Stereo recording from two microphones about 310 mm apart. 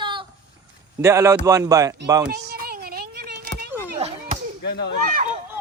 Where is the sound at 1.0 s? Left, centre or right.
Centre.